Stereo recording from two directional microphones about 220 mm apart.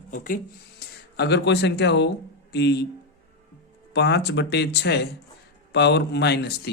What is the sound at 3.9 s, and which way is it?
Speech, 50° left (ahead or behind).